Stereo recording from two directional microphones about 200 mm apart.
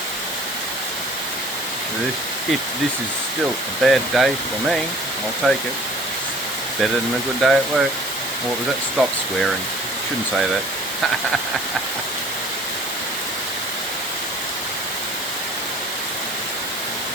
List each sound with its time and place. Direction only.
3.8 s speech: centre (ahead or behind)
5.4 s speech: centre (ahead or behind)
7.4 s speech: centre (ahead or behind)
9.0 s speech: centre (ahead or behind)